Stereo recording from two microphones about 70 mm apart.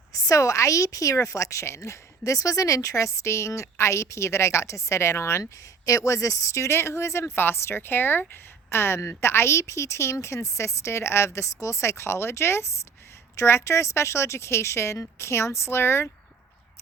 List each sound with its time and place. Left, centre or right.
0.1 s a woman's voice: left
5.4 s a woman's voice: left